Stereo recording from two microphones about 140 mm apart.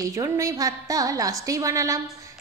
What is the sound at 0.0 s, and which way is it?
A woman's voice, 25° right (ahead or behind).